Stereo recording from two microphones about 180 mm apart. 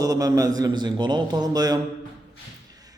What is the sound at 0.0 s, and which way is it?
A man's voice, 20° right (ahead or behind).